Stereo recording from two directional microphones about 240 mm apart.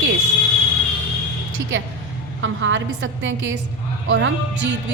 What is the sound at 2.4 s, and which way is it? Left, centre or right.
A woman's voice, right.